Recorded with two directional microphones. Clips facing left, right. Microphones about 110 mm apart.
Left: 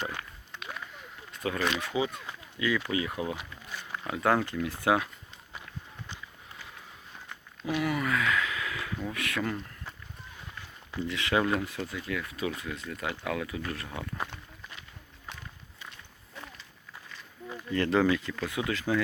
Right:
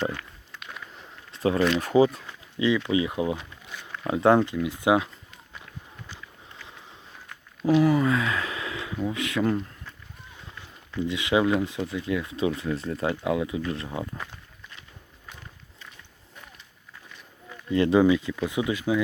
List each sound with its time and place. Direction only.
0.0 s speech: 20° left (ahead or behind)
1.3 s a sound: 30° right (ahead or behind)
1.8 s speech: 40° right (ahead or behind)
2.6 s speech: 25° right (ahead or behind)
7.6 s a sound: 30° right (ahead or behind)
9.1 s speech: 20° right (ahead or behind)
11.0 s speech: 20° right (ahead or behind)
17.7 s speech: 15° right (ahead or behind)